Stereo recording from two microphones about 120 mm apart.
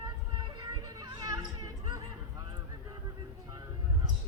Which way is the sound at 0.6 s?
30° right (ahead or behind).